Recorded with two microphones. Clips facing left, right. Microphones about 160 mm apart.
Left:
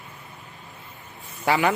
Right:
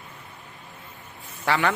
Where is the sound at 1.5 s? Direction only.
15° left (ahead or behind).